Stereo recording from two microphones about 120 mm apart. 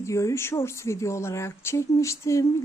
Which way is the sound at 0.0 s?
25° left (ahead or behind).